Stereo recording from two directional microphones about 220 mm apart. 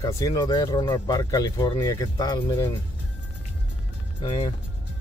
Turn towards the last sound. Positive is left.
turn(degrees=25)  # may be behind; listen again after turning